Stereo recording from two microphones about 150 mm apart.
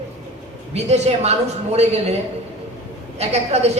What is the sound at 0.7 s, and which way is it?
Speech, 45° right (ahead or behind).